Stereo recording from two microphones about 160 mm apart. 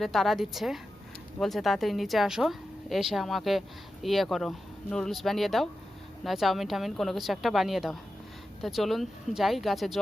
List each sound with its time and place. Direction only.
0.0 s speech: centre (ahead or behind)